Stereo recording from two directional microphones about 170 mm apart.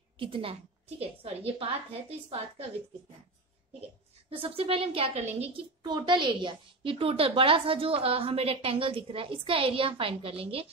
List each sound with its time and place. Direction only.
0.2 s a woman's voice: 30° right (ahead or behind)
4.4 s a woman's voice: 35° right (ahead or behind)